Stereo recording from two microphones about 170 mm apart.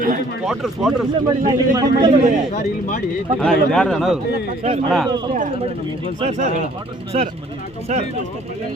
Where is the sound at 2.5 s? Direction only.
50° left (ahead or behind).